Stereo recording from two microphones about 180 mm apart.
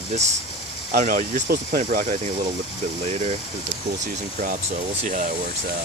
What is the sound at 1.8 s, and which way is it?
Speech, 40° right (ahead or behind).